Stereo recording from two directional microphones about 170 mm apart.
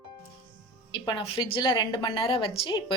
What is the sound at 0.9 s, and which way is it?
A woman's voice, 25° left (ahead or behind).